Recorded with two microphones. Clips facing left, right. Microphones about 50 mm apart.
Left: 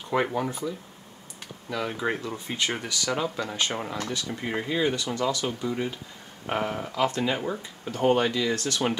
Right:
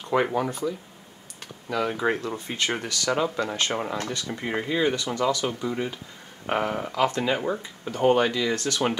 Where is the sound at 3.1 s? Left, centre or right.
Centre.